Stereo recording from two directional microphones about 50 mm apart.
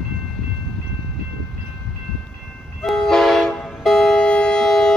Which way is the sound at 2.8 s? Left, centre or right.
Centre.